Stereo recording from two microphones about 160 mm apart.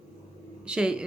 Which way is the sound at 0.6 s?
5° right (ahead or behind).